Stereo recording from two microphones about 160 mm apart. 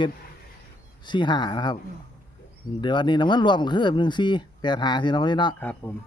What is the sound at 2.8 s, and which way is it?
Speech, 30° left (ahead or behind).